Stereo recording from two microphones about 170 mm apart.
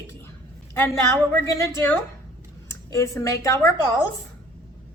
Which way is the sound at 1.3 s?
15° left (ahead or behind).